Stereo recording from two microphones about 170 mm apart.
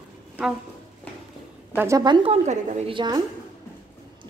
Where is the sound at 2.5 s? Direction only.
45° right (ahead or behind).